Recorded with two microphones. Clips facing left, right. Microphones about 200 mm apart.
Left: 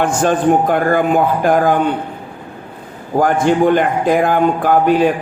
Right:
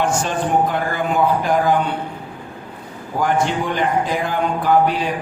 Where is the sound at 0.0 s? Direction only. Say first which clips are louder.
Left 6 dB; 55° left (ahead or behind).